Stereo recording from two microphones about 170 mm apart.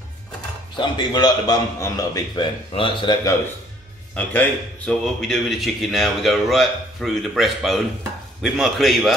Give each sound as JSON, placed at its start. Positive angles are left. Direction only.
{"t": 0.7, "sound": "a man's voice", "side_deg": 25}
{"t": 4.1, "sound": "a man's voice", "side_deg": 10}